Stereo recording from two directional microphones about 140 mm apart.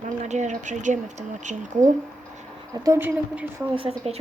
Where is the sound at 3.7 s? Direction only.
45° right (ahead or behind).